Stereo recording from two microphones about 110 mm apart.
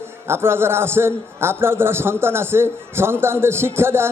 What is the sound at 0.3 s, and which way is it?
A man's voice, 20° right (ahead or behind).